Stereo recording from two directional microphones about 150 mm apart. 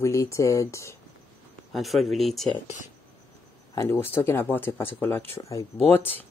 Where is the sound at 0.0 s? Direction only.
20° left (ahead or behind).